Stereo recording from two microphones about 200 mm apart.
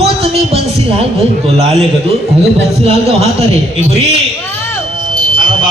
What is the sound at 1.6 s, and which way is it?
A man's voice, 30° right (ahead or behind).